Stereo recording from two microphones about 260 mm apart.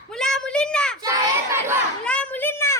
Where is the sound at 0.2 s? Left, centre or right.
Centre.